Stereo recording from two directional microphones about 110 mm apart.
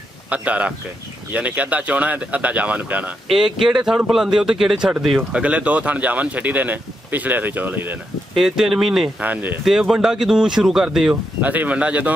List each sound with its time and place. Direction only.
0.3 s speech: 10° right (ahead or behind)
3.3 s speech: 5° right (ahead or behind)
8.4 s speech: 5° right (ahead or behind)
9.2 s speech: 15° right (ahead or behind)
9.7 s speech: centre (ahead or behind)
11.4 s speech: 15° right (ahead or behind)